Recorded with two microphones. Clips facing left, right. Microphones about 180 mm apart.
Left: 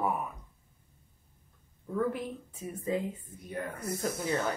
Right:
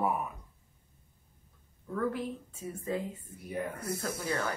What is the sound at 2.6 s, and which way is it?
Speech, 15° left (ahead or behind).